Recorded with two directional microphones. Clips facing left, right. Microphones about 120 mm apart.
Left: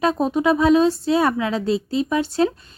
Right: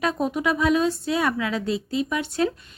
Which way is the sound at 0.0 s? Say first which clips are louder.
Left 5 dB; 30° left (ahead or behind).